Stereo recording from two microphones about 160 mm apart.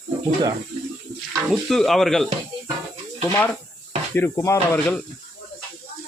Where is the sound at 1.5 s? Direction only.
Centre (ahead or behind).